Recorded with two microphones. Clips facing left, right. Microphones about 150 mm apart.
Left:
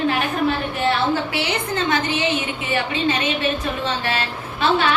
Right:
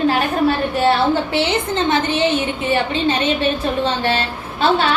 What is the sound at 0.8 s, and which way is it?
A woman's voice, 25° right (ahead or behind).